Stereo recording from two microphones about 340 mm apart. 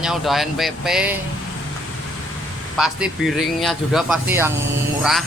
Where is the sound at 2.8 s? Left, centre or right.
Centre.